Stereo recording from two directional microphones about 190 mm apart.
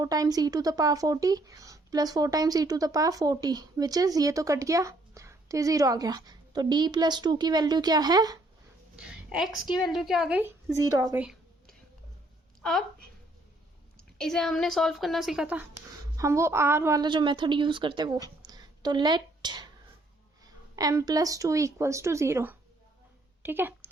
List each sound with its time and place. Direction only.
0.0 s a woman's voice: 20° right (ahead or behind)
9.0 s a woman's voice: 5° right (ahead or behind); by 11.2 s 20° right (ahead or behind)
12.6 s a woman's voice: 5° left (ahead or behind)
14.2 s a woman's voice: centre (ahead or behind); by 22.5 s 15° right (ahead or behind)
23.4 s a sound: 10° right (ahead or behind)